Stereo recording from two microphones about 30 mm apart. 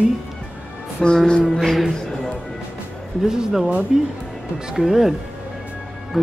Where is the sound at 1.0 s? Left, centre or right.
Left.